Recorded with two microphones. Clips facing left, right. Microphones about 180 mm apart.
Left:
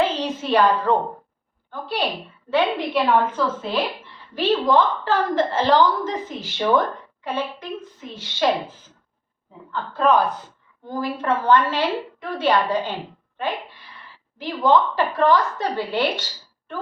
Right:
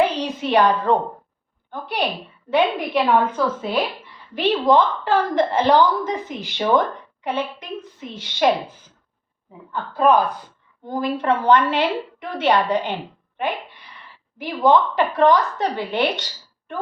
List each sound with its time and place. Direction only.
0.0 s a sound: 15° right (ahead or behind)
1.7 s a woman's voice: 20° right (ahead or behind)
8.1 s a woman's voice: 20° right (ahead or behind)
9.9 s a woman's voice: 15° right (ahead or behind)